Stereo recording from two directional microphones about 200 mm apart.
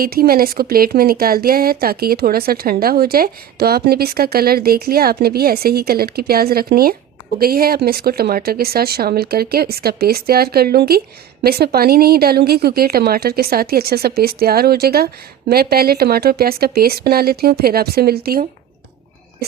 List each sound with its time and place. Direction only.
0.0 s a woman's voice: 50° right (ahead or behind)